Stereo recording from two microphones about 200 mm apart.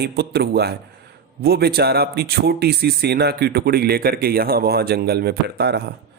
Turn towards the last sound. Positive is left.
turn(degrees=-55)  # may be behind; listen again after turning